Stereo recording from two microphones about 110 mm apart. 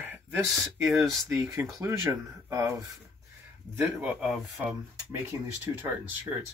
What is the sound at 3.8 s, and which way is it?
Speech, 15° right (ahead or behind).